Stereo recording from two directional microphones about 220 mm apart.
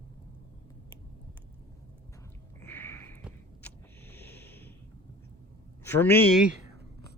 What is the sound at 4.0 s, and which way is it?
Snort, 10° left (ahead or behind).